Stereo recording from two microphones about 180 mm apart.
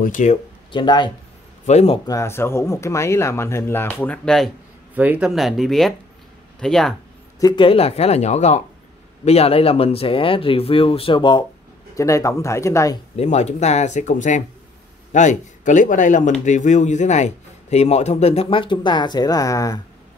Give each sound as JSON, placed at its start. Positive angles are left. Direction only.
{"t": 0.0, "sound": "speech", "side_deg": 45}
{"t": 0.7, "sound": "speech", "side_deg": 25}
{"t": 1.7, "sound": "speech", "side_deg": 40}
{"t": 2.0, "sound": "speech", "side_deg": 15}
{"t": 4.9, "sound": "speech", "side_deg": -10}
{"t": 7.3, "sound": "speech", "side_deg": 25}
{"t": 13.1, "sound": "speech", "side_deg": 40}